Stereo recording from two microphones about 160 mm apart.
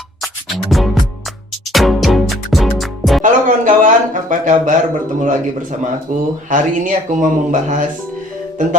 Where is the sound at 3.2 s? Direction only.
55° right (ahead or behind).